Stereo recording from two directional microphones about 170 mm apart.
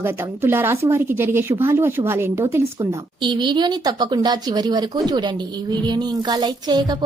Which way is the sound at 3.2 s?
25° right (ahead or behind).